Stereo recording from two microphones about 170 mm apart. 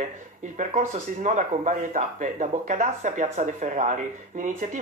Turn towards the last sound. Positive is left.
turn(degrees=-50)  # may be behind; listen again after turning